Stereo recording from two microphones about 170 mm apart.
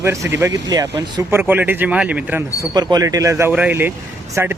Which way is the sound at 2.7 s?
25° right (ahead or behind).